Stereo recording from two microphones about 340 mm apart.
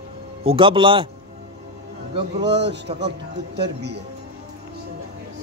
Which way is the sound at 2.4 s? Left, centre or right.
Right.